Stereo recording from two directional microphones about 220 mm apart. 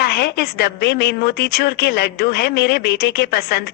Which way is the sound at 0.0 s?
45° left (ahead or behind).